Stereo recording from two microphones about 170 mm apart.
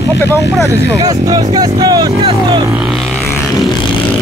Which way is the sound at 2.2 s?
35° right (ahead or behind).